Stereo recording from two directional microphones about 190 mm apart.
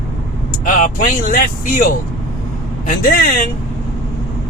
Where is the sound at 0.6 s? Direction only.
45° left (ahead or behind).